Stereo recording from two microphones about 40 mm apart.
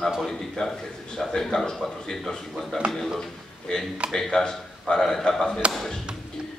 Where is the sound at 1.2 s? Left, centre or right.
Centre.